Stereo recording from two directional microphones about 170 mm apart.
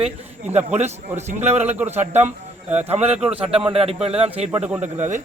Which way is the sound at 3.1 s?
5° right (ahead or behind).